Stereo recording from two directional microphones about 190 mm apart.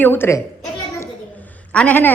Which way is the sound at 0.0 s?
10° left (ahead or behind).